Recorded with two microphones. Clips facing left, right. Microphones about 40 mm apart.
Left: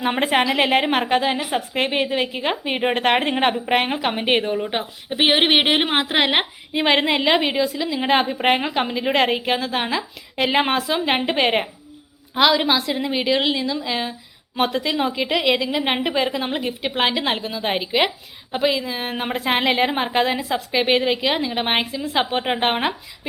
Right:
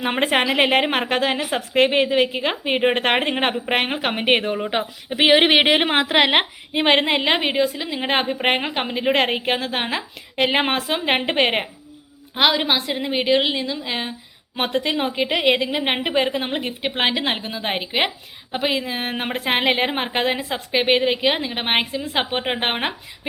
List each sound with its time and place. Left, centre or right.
0.0 s a woman's voice: right
5.0 s a woman's voice: right
6.3 s a woman's voice: right
12.3 s a woman's voice: right
14.5 s a woman's voice: right
19.5 s a woman's voice: right